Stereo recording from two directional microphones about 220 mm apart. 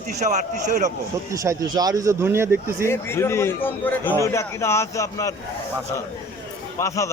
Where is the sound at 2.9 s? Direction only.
10° left (ahead or behind).